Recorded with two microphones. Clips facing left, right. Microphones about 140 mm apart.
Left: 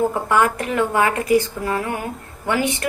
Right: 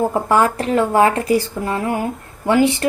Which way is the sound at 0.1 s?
35° right (ahead or behind).